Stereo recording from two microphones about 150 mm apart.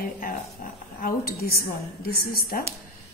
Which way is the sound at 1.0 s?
90° left.